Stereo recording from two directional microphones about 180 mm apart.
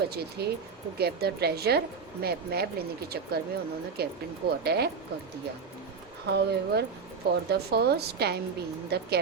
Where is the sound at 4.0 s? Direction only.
60° right (ahead or behind).